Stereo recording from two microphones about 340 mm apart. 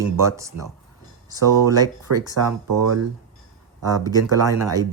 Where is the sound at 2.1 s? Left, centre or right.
Right.